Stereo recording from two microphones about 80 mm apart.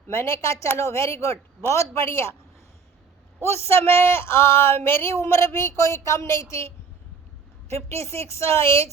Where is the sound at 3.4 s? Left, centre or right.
Left.